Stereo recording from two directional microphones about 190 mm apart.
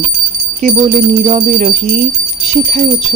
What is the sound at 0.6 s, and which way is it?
Speech, 40° right (ahead or behind).